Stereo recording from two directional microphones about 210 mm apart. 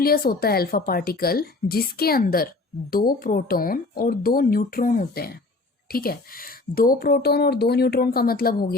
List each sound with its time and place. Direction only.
0.0 s a woman's voice: 45° left (ahead or behind)